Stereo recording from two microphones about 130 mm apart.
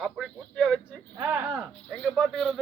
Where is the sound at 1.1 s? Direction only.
20° right (ahead or behind).